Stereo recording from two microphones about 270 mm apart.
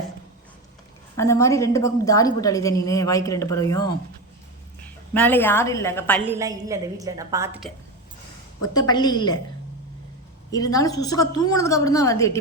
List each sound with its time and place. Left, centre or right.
1.1 s a woman's voice: centre
5.1 s a woman's voice: centre
6.2 s a woman's voice: centre
8.7 s a woman's voice: centre
10.5 s a woman's voice: centre